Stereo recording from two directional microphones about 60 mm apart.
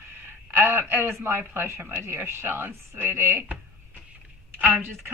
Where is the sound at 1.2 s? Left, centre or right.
Right.